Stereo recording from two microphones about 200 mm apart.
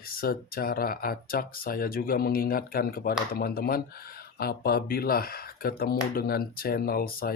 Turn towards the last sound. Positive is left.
turn(degrees=50)  # may be behind; listen again after turning